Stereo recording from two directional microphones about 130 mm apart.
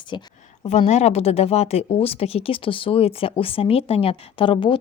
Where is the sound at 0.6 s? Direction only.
60° left (ahead or behind).